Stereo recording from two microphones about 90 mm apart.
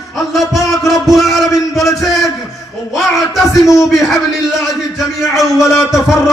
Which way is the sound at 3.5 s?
35° left (ahead or behind).